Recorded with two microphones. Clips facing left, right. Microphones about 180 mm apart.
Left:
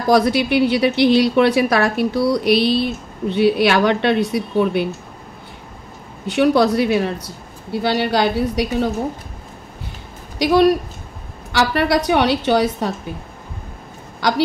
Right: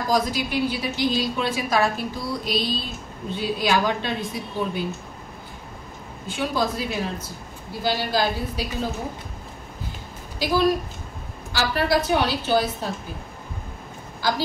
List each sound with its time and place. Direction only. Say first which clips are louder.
0.0 s a woman's voice: left 8 dB; 70° left (ahead or behind)
6.2 s a woman's voice: left 10 dB; 70° left (ahead or behind)
10.4 s a woman's voice: left 7 dB; 70° left (ahead or behind)
14.2 s a woman's voice: left 5 dB; 70° left (ahead or behind)